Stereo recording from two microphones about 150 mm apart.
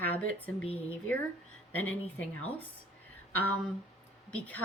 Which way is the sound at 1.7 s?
10° left (ahead or behind).